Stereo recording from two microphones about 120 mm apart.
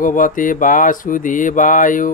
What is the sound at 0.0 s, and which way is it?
Mantra, 90° left.